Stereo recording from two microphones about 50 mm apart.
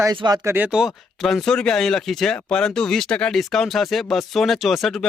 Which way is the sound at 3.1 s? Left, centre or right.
Left.